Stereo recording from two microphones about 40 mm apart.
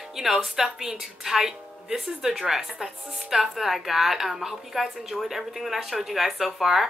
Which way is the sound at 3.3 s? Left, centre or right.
Centre.